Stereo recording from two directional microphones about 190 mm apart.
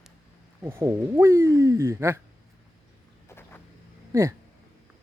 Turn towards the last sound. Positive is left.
turn(degrees=-15)  # may be behind; listen again after turning